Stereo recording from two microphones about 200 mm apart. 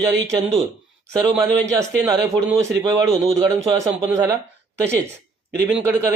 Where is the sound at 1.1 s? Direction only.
15° right (ahead or behind).